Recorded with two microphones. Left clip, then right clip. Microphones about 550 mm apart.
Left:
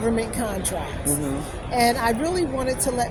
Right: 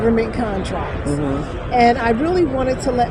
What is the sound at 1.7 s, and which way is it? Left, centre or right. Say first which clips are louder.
A woman's voice: right 6 dB; left.